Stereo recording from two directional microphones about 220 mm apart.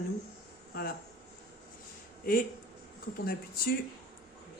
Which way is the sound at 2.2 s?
40° left (ahead or behind).